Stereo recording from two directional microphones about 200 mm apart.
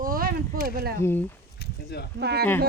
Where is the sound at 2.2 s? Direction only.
55° right (ahead or behind).